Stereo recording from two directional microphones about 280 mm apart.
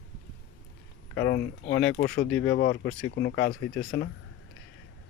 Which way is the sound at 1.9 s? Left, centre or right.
Left.